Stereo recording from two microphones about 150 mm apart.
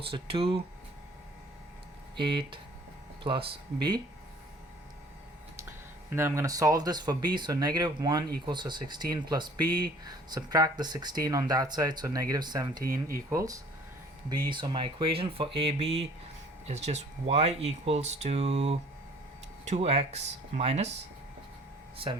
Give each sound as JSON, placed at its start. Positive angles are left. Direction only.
{"t": 0.0, "sound": "speech", "side_deg": -35}
{"t": 2.1, "sound": "speech", "side_deg": -30}
{"t": 5.5, "sound": "speech", "side_deg": -15}
{"t": 21.9, "sound": "speech", "side_deg": -35}